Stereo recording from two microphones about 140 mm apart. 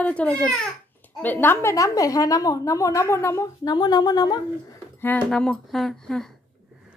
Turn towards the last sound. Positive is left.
turn(degrees=5)  # may be behind; listen again after turning